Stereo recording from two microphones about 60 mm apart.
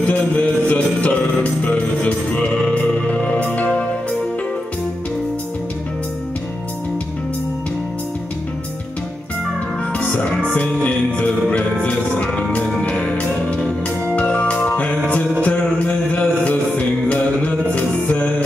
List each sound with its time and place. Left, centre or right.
0.0 s music: centre
10.5 s music: left